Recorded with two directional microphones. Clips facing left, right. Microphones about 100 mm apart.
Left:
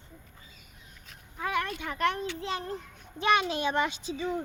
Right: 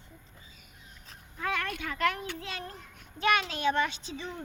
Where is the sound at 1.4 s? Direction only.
15° left (ahead or behind).